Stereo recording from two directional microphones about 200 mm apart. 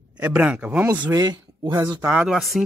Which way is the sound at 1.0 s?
20° right (ahead or behind).